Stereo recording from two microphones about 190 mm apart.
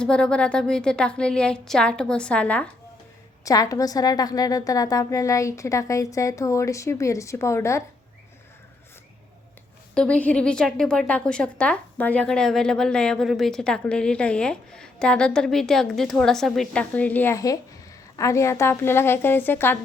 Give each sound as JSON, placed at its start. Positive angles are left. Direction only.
{"t": 0.0, "sound": "a woman's voice", "side_deg": 5}
{"t": 3.4, "sound": "a woman's voice", "side_deg": 20}
{"t": 9.9, "sound": "a woman's voice", "side_deg": 5}